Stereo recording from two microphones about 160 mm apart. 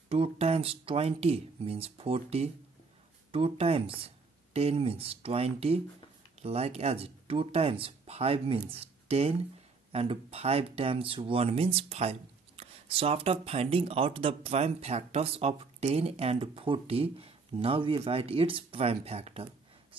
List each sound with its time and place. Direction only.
0.1 s speech: 40° right (ahead or behind)